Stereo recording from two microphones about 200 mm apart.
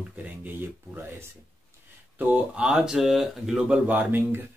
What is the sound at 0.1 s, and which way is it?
Speech, 10° right (ahead or behind).